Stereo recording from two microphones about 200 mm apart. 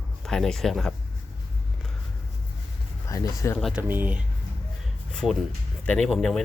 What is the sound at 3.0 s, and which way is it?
Speech, 15° left (ahead or behind).